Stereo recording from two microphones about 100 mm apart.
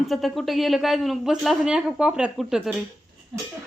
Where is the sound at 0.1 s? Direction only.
Centre (ahead or behind).